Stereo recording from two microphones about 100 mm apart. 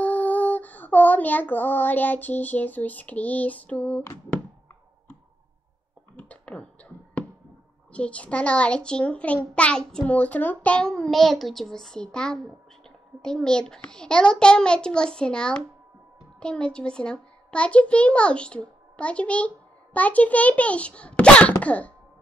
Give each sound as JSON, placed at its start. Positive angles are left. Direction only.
{"t": 0.0, "sound": "female singing", "side_deg": 15}
{"t": 6.1, "sound": "a sound", "side_deg": 15}
{"t": 7.9, "sound": "a child's voice", "side_deg": 10}